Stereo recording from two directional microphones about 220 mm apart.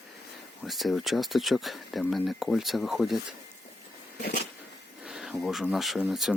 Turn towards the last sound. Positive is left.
turn(degrees=0)  # may be behind; listen again after turning